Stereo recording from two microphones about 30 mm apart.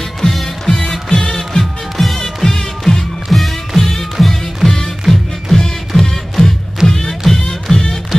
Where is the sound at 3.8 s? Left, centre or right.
Centre.